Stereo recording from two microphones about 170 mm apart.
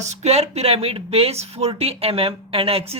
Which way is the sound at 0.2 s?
40° right (ahead or behind).